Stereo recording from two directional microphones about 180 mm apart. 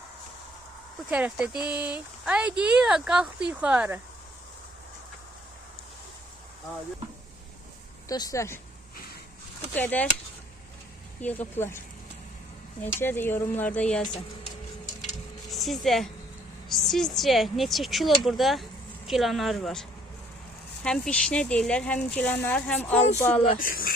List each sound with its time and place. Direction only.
1.1 s speech: 10° right (ahead or behind)
8.0 s speech: 20° left (ahead or behind)
9.7 s speech: 10° left (ahead or behind)
11.2 s speech: 10° left (ahead or behind)
13.0 s speech: 10° left (ahead or behind)
15.4 s speech: centre (ahead or behind)
20.8 s speech: 5° left (ahead or behind)
23.6 s a woman's voice: 50° left (ahead or behind)